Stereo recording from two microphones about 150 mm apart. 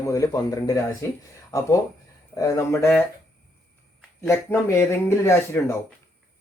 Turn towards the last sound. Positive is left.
turn(degrees=20)  # may be behind; listen again after turning